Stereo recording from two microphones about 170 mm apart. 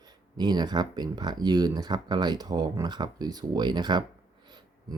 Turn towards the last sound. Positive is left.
turn(degrees=-25)  # may be behind; listen again after turning